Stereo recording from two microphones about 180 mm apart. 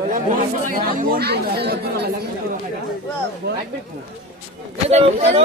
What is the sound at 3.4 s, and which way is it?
Speech, 65° right (ahead or behind).